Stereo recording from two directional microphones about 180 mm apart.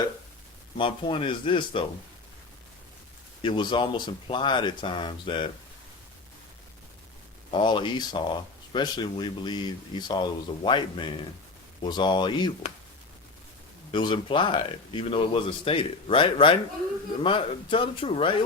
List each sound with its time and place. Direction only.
0.8 s speech: 30° left (ahead or behind)
3.4 s speech: 25° left (ahead or behind)
7.5 s speech: 30° left (ahead or behind)
13.9 s speech: 25° left (ahead or behind)